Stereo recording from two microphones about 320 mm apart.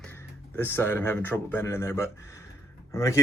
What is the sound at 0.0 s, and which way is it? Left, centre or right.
Speech, centre.